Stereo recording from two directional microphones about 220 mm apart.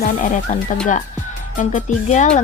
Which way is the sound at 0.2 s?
35° left (ahead or behind).